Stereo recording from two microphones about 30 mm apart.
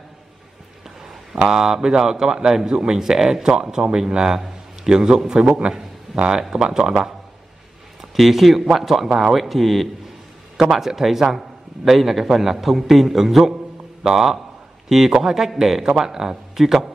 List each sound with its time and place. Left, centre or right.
0.8 s a man's voice: centre; by 5.8 s right
6.1 s a sound: centre
6.5 s speech: right
8.0 s a man's voice: centre
10.7 s a man's voice: centre